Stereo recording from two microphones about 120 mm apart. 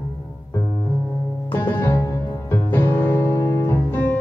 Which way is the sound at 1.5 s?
20° left (ahead or behind).